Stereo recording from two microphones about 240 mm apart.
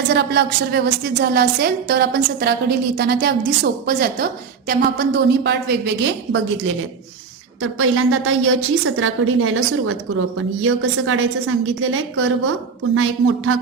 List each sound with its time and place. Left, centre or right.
0.1 s a woman's voice: right
7.6 s a woman's voice: right